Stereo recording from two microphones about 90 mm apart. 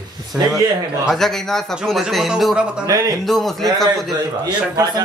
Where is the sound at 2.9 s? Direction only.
45° right (ahead or behind).